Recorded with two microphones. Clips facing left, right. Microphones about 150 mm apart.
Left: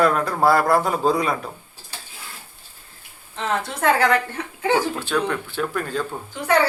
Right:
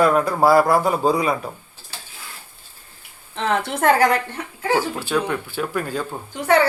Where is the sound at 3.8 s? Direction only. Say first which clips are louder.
Right 2 dB; 40° right (ahead or behind).